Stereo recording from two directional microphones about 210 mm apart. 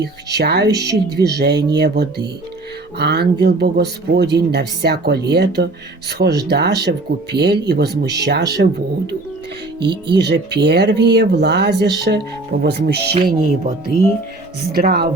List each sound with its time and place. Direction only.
0.0 s speech: 50° right (ahead or behind)
9.8 s speech: 50° right (ahead or behind)
14.7 s speech: 45° right (ahead or behind)